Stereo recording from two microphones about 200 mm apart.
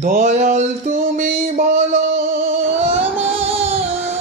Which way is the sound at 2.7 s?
10° right (ahead or behind).